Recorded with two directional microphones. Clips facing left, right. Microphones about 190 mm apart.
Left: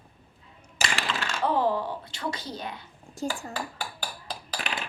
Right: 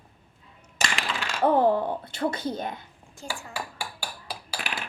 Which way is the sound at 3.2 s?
40° left (ahead or behind).